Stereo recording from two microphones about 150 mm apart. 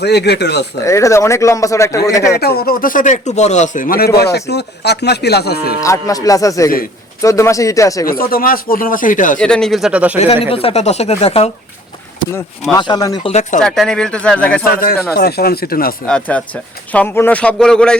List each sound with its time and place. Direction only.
0.0 s speech: 90° left
0.8 s speech: 20° left (ahead or behind)
2.3 s speech: 90° left
5.8 s speech: 20° left (ahead or behind)
8.0 s speech: 75° left (ahead or behind); by 9.4 s 60° left (ahead or behind)
9.4 s speech: 5° left (ahead or behind)
10.4 s speech: 40° left (ahead or behind)
12.7 s speech: 25° left (ahead or behind)
13.2 s speech: 45° left (ahead or behind)
13.6 s speech: 5° left (ahead or behind)
14.6 s speech: 80° left
15.1 s speech: 90° left
16.0 s speech: 10° left (ahead or behind)